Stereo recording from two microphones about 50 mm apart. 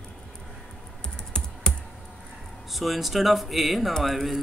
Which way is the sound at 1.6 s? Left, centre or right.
Centre.